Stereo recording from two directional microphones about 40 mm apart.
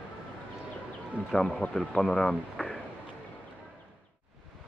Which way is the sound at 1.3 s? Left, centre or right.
Centre.